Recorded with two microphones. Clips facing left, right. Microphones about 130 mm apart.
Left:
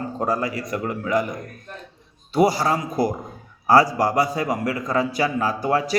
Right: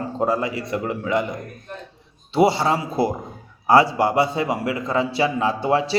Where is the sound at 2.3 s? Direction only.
25° right (ahead or behind).